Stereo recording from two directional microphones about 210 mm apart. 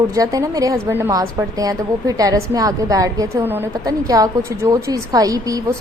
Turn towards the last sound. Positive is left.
turn(degrees=-15)  # may be behind; listen again after turning